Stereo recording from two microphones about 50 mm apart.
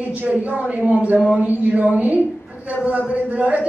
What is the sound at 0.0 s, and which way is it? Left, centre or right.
A woman's voice, right.